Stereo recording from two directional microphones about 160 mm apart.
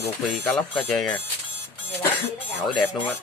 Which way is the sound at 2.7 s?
30° left (ahead or behind).